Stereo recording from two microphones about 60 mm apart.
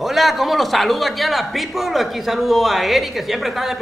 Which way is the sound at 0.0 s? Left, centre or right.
Centre.